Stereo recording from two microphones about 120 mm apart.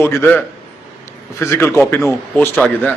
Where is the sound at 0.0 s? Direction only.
20° left (ahead or behind).